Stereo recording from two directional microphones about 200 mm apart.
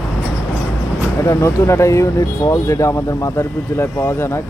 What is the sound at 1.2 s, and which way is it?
Speech, 15° left (ahead or behind).